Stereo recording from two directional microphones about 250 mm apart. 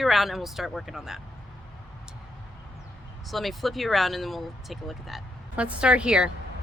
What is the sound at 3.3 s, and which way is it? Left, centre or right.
Speech, centre.